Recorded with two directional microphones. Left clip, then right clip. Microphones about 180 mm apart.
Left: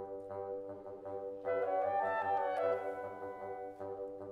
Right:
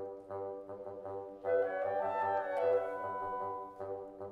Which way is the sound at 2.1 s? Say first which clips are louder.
Even; 15° left (ahead or behind).